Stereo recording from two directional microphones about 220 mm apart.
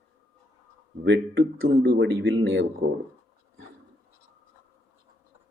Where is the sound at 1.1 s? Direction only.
55° right (ahead or behind).